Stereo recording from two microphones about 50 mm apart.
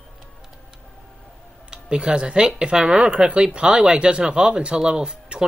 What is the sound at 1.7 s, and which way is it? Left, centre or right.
Speech, centre.